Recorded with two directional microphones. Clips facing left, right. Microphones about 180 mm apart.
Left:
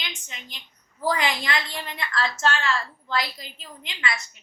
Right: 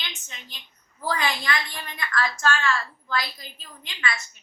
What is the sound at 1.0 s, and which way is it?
A woman's voice, 20° left (ahead or behind).